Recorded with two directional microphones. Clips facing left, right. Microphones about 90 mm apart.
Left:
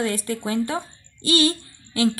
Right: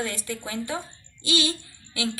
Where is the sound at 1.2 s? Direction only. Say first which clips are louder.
Left 6 dB; 40° left (ahead or behind).